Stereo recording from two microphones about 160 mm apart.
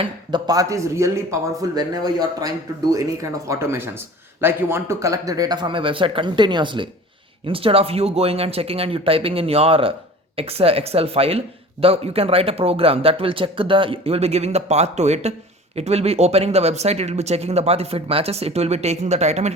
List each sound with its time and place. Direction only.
0.0 s speech: 30° right (ahead or behind); by 19.5 s 45° right (ahead or behind)